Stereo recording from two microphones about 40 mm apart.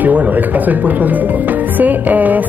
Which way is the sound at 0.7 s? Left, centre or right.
Right.